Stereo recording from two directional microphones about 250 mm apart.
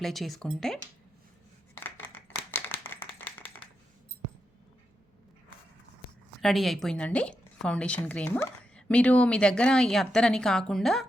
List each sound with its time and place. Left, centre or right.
0.0 s speech: centre
1.7 s a sound: centre
6.4 s speech: centre